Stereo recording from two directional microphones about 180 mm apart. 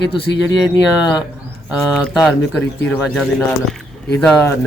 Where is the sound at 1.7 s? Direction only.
Centre (ahead or behind); by 4.6 s 15° left (ahead or behind).